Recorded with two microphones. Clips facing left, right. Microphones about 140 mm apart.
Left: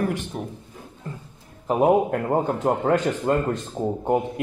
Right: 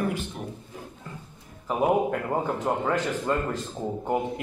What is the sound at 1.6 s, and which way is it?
A man's voice, 25° left (ahead or behind).